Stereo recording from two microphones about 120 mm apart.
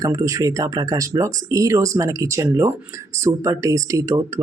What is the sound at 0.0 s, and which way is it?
Speech, 30° right (ahead or behind).